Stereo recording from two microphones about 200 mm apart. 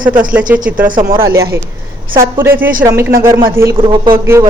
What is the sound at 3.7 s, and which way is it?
Speech, 25° right (ahead or behind).